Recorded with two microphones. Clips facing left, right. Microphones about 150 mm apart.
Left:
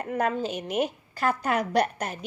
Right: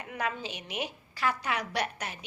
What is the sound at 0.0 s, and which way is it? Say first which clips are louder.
Speech: left 8 dB; 45° left (ahead or behind).